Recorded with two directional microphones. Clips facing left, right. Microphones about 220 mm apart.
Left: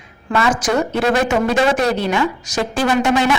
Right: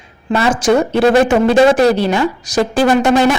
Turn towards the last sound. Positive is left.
turn(degrees=-45)  # may be behind; listen again after turning